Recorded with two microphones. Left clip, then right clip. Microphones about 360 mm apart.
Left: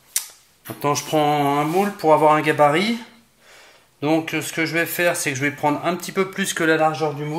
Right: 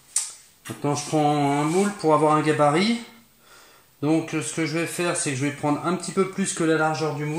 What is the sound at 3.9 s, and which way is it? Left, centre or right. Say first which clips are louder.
Speech: left 3 dB; left.